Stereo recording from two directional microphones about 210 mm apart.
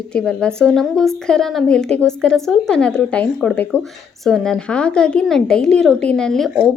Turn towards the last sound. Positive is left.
turn(degrees=0)  # may be behind; listen again after turning